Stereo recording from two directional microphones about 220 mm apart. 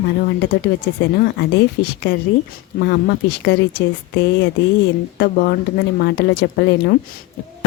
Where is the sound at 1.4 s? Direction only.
50° left (ahead or behind).